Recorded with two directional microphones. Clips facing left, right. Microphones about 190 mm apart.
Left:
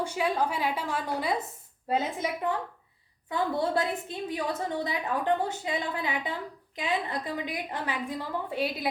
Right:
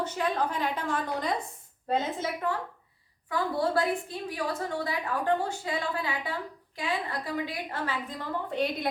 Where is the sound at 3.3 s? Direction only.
20° left (ahead or behind).